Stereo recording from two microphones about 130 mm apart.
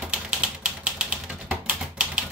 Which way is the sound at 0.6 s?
5° right (ahead or behind).